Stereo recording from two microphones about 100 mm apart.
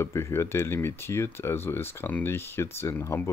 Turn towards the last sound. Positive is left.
turn(degrees=25)  # may be behind; listen again after turning